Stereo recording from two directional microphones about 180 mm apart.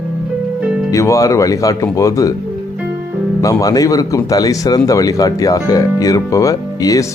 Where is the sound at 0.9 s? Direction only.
20° left (ahead or behind).